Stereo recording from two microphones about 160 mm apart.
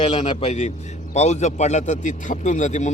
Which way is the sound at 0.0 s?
40° left (ahead or behind).